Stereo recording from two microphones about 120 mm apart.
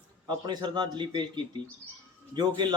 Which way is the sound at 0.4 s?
40° right (ahead or behind).